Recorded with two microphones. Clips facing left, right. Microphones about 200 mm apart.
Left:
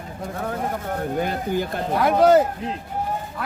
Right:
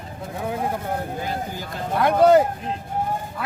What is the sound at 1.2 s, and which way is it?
Speech, 60° left (ahead or behind).